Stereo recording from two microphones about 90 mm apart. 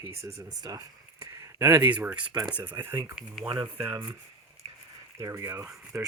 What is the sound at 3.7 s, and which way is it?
Speech, 20° right (ahead or behind).